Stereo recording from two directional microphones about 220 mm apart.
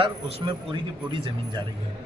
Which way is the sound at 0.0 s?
25° right (ahead or behind).